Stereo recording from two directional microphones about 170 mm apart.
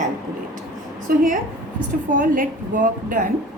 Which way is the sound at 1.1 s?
55° right (ahead or behind).